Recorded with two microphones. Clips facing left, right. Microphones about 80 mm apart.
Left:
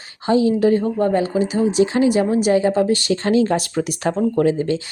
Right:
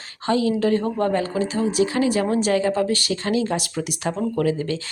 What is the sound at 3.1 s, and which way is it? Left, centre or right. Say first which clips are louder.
Speech: left 6 dB; left.